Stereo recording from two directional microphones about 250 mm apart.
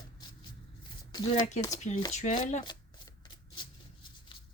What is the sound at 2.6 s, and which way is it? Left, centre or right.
Shuffling cards, centre.